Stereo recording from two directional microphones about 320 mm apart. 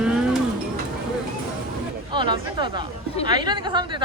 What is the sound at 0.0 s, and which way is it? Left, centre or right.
Music, centre.